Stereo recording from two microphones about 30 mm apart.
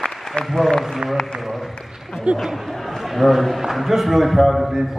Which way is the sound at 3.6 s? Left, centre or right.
Centre.